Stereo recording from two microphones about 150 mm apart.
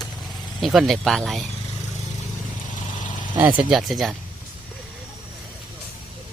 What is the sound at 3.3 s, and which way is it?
Speech, 10° right (ahead or behind).